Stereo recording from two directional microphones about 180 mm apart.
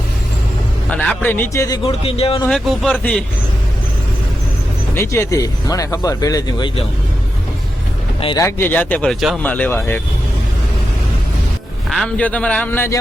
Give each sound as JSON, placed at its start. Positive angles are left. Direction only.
{"t": 0.9, "sound": "speech", "side_deg": 5}
{"t": 1.9, "sound": "speech", "side_deg": 30}
{"t": 2.5, "sound": "a man's voice", "side_deg": 5}
{"t": 4.9, "sound": "speech", "side_deg": 15}
{"t": 8.4, "sound": "speech", "side_deg": 15}
{"t": 11.9, "sound": "speech", "side_deg": 5}